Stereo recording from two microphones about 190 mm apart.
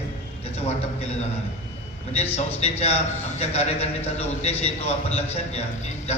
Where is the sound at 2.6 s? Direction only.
35° left (ahead or behind).